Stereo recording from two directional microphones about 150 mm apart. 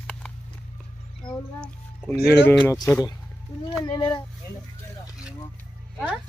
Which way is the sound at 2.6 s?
20° left (ahead or behind).